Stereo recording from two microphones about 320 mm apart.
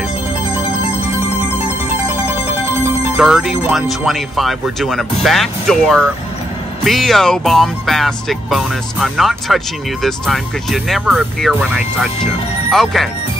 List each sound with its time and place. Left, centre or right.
3.2 s speech: centre